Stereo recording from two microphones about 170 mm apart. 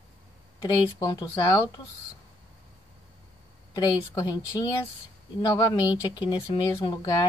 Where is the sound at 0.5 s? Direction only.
20° left (ahead or behind).